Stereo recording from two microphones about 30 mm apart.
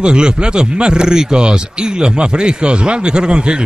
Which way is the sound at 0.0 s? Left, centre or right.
Right.